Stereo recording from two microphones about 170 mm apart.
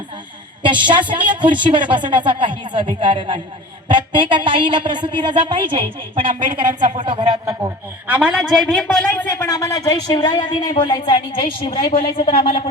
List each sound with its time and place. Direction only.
0.6 s a woman's voice: 30° right (ahead or behind)
8.0 s a man's voice: 10° right (ahead or behind); by 12.7 s 30° left (ahead or behind)